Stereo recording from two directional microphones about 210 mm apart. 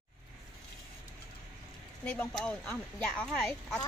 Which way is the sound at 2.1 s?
5° left (ahead or behind).